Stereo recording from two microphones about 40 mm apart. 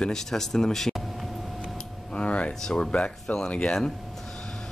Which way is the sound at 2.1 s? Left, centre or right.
Left.